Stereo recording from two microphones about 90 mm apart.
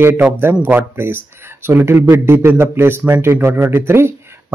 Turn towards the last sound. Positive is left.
turn(degrees=-25)  # may be behind; listen again after turning